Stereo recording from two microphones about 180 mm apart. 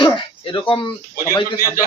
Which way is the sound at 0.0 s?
30° left (ahead or behind).